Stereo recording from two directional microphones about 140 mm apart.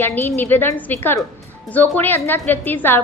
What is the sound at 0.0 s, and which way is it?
A woman's voice, 15° left (ahead or behind).